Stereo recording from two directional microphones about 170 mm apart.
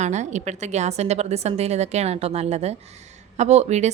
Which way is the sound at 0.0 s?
45° right (ahead or behind).